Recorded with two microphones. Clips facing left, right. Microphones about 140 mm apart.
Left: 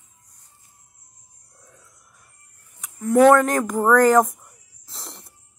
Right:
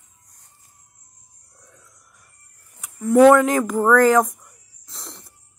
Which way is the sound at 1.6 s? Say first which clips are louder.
Even; 5° left (ahead or behind).